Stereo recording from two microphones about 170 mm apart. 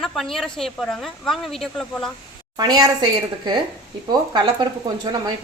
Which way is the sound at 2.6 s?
25° right (ahead or behind).